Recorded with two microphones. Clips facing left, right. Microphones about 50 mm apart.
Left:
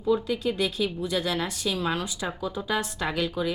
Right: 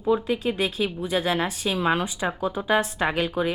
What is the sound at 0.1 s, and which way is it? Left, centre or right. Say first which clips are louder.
Speech: right 2 dB; right.